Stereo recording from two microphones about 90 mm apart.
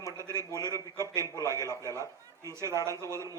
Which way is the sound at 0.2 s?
35° right (ahead or behind).